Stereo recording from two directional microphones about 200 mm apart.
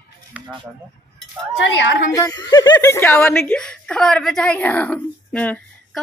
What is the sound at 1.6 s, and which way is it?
Speech, 65° left (ahead or behind).